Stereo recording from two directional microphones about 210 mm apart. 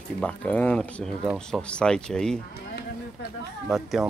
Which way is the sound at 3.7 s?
Centre (ahead or behind).